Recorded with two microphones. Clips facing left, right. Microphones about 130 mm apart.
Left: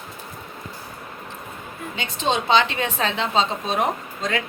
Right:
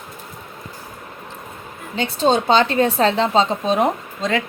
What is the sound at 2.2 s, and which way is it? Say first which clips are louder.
Speech: right 4 dB; 40° right (ahead or behind).